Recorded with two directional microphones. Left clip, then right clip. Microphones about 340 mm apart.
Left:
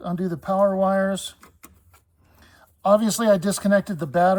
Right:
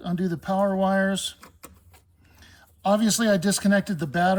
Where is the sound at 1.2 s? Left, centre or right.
Centre.